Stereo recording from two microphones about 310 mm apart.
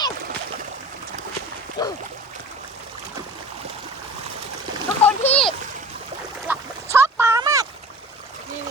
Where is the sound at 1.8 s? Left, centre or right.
Centre.